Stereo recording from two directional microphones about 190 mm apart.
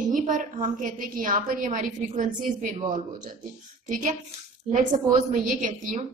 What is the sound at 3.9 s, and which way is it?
A woman's voice, 40° right (ahead or behind).